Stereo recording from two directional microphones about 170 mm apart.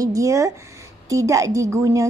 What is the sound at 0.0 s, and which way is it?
A woman's voice, 20° right (ahead or behind).